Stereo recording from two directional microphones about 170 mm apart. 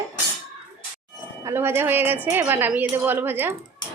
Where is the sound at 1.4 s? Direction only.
15° right (ahead or behind).